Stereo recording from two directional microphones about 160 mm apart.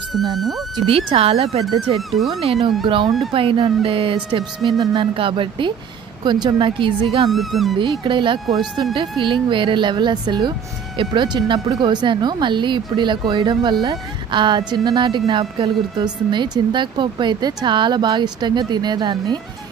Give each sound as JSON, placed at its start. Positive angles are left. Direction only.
{"t": 0.1, "sound": "speech", "side_deg": 0}
{"t": 0.7, "sound": "speech", "side_deg": -35}
{"t": 2.0, "sound": "speech", "side_deg": 0}
{"t": 2.4, "sound": "a woman's voice", "side_deg": -35}
{"t": 7.2, "sound": "speech", "side_deg": 0}
{"t": 7.8, "sound": "a woman's voice", "side_deg": -30}